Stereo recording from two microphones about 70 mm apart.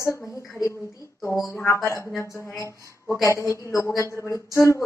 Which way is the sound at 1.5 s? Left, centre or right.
Left.